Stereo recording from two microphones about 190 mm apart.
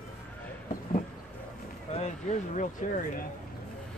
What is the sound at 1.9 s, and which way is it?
Speech, 35° left (ahead or behind).